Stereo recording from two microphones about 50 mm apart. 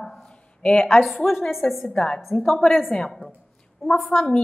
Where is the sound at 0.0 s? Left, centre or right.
Centre.